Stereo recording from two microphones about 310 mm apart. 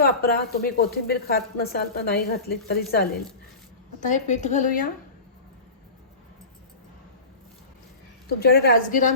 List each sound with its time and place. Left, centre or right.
0.0 s speech: left
8.3 s speech: left